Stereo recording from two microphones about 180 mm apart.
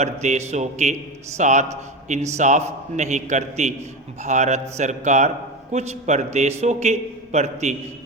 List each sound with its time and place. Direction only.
0.0 s a man's voice: 40° right (ahead or behind)